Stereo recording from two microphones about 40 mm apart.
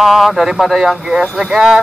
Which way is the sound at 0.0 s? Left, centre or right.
Centre.